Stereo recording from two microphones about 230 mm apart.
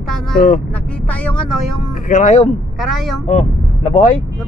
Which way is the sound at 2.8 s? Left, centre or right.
Centre.